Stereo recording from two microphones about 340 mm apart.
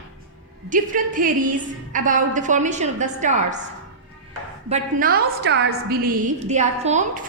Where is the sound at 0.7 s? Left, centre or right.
Right.